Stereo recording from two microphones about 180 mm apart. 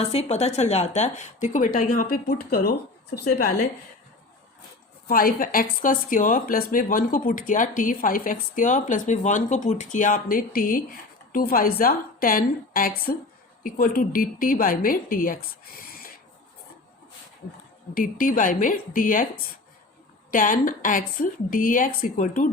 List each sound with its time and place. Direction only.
0.0 s a woman's voice: 35° left (ahead or behind); by 3.7 s 60° left (ahead or behind)
5.0 s a woman's voice: 55° left (ahead or behind)
17.9 s a woman's voice: 50° left (ahead or behind)
20.3 s a woman's voice: 50° left (ahead or behind)